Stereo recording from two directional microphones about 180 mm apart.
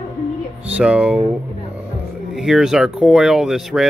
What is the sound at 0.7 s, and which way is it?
Speech, 5° right (ahead or behind).